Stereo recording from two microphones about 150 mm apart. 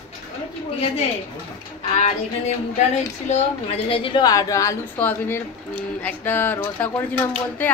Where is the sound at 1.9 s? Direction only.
50° left (ahead or behind); by 4.7 s 20° left (ahead or behind).